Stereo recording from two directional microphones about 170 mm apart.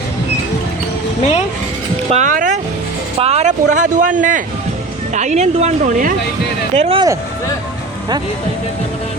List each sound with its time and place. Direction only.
2.0 s music: 45° right (ahead or behind)
3.2 s a sound: 40° right (ahead or behind)
4.2 s speech: 50° right (ahead or behind)
6.7 s speech: 40° right (ahead or behind)